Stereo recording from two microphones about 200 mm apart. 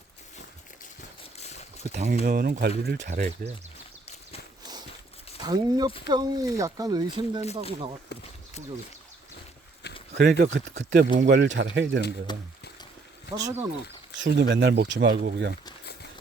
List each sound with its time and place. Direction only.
1.2 s boat: 30° left (ahead or behind)
1.8 s speech: 35° right (ahead or behind)
3.1 s speech: 35° right (ahead or behind)
5.4 s speech: 20° right (ahead or behind)
8.1 s speech: 60° left (ahead or behind)
9.8 s a sound: 55° left (ahead or behind)
10.2 s speech: 55° right (ahead or behind)
12.3 s speech: 20° left (ahead or behind)
13.3 s speech: 15° right (ahead or behind)
14.2 s speech: 60° right (ahead or behind)